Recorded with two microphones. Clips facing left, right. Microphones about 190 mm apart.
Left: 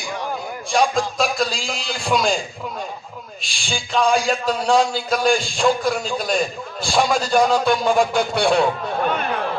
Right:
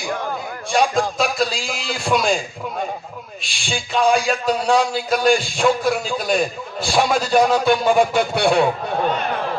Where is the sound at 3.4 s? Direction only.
Centre (ahead or behind).